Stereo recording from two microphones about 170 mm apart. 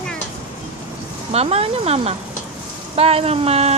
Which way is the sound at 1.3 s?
35° right (ahead or behind).